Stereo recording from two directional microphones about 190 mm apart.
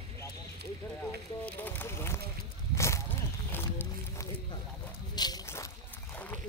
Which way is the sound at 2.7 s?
15° left (ahead or behind).